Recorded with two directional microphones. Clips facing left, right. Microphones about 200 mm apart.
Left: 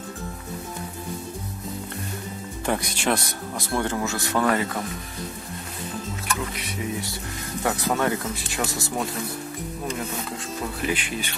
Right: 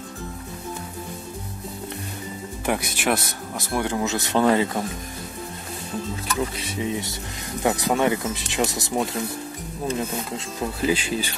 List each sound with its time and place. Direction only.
2.6 s speech: 10° right (ahead or behind)
3.8 s speech: 20° right (ahead or behind)
6.5 s speech: 30° right (ahead or behind)
10.3 s speech: 30° right (ahead or behind)